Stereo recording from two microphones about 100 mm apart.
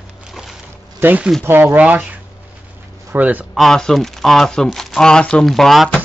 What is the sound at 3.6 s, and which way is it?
Speech, 5° left (ahead or behind).